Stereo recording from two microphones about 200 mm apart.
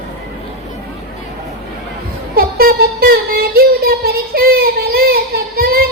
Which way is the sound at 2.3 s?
50° right (ahead or behind).